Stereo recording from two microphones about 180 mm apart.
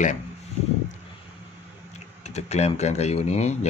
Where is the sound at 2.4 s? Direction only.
35° left (ahead or behind).